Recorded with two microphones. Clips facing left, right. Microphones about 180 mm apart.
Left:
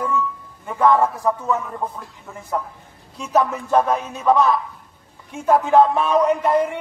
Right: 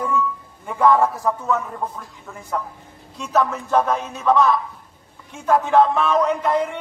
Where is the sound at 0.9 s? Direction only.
5° left (ahead or behind).